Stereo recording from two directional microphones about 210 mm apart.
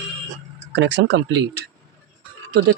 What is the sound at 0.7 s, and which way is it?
Speech, 60° right (ahead or behind).